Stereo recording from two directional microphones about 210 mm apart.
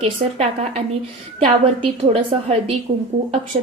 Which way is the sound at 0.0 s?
30° right (ahead or behind).